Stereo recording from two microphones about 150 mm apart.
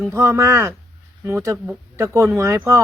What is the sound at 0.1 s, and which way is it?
Speech, 20° right (ahead or behind).